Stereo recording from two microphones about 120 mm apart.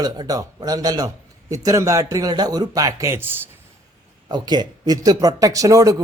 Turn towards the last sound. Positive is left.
turn(degrees=-30)  # may be behind; listen again after turning